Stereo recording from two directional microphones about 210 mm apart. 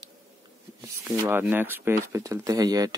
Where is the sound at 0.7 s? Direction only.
15° right (ahead or behind).